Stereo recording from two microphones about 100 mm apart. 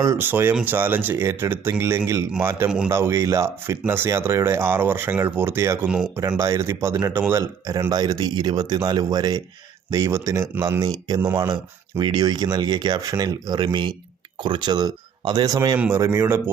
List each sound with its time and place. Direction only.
0.0 s speech: 30° right (ahead or behind)
2.6 s a man's voice: 10° right (ahead or behind)
2.9 s speech: 30° right (ahead or behind)
7.9 s speech: 45° right (ahead or behind)
9.9 s speech: 30° right (ahead or behind)
15.9 s speech: 25° right (ahead or behind)